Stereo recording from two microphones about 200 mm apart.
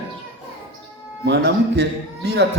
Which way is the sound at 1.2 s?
55° right (ahead or behind).